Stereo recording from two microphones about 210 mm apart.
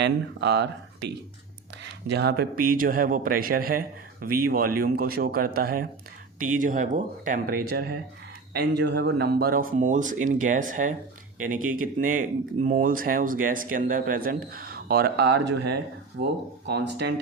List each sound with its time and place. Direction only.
0.0 s speech: 55° right (ahead or behind)